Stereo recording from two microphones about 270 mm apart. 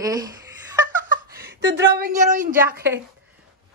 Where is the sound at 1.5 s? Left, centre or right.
Right.